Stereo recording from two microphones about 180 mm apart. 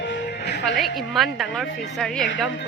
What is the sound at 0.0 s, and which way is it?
Music, 75° left (ahead or behind).